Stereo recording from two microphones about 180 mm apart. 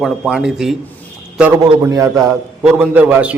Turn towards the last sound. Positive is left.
turn(degrees=-10)  # may be behind; listen again after turning